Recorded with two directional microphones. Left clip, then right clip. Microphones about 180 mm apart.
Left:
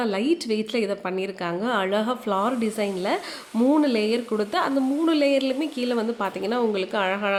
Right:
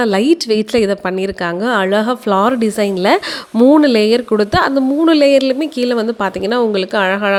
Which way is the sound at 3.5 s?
30° right (ahead or behind).